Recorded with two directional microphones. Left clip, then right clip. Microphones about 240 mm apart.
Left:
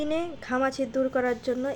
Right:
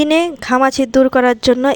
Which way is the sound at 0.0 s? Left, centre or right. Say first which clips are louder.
Right 15 dB; right.